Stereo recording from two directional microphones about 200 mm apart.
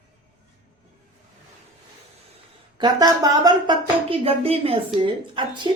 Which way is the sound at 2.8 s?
20° right (ahead or behind).